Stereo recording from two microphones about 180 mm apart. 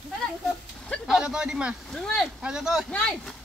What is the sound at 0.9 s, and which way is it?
Speech, 5° right (ahead or behind).